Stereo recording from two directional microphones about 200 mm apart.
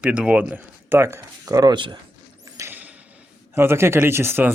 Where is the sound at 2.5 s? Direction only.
10° right (ahead or behind).